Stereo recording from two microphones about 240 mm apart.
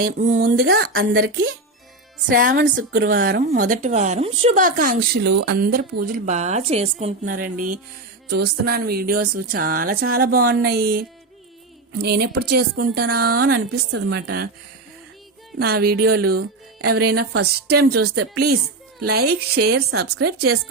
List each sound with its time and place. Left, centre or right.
0.0 s a woman's voice: right
0.6 s a woman's voice: right
15.5 s a woman's voice: right